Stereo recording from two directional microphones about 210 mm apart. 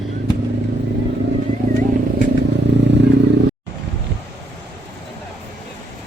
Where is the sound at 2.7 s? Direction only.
55° right (ahead or behind).